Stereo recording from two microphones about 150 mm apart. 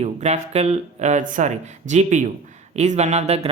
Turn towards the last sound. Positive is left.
turn(degrees=-45)  # may be behind; listen again after turning